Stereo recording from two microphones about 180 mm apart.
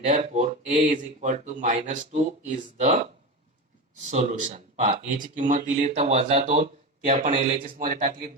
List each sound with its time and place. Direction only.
0.2 s speech: 40° right (ahead or behind)
4.1 s speech: 45° right (ahead or behind)